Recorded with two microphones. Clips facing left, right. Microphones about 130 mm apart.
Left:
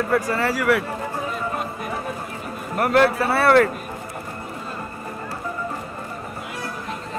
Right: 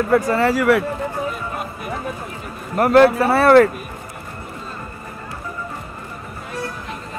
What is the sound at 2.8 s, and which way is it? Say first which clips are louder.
Speech: right 5 dB; 30° right (ahead or behind).